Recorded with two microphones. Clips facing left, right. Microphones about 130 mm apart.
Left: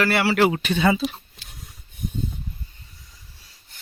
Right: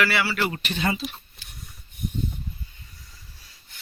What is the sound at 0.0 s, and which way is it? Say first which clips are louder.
Speech: left 2 dB; 50° left (ahead or behind).